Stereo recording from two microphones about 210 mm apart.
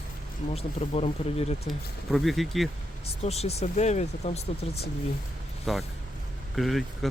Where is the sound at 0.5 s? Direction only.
30° left (ahead or behind).